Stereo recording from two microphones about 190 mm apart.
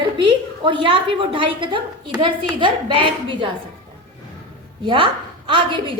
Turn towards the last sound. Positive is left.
turn(degrees=-25)  # may be behind; listen again after turning